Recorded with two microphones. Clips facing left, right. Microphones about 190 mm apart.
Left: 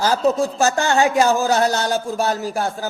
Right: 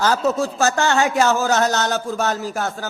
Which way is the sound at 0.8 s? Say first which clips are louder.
Left 2 dB; 15° left (ahead or behind).